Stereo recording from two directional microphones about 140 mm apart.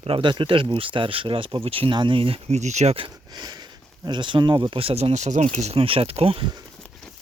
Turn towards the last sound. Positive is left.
turn(degrees=-45)  # may be behind; listen again after turning